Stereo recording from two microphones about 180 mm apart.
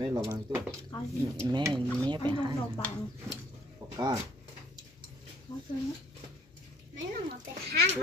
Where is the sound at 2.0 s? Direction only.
25° right (ahead or behind).